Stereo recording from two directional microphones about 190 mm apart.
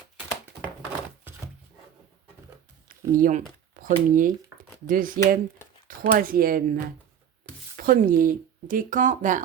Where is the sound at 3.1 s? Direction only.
45° right (ahead or behind).